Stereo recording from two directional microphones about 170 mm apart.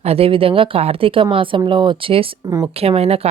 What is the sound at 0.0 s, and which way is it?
Speech, 35° right (ahead or behind).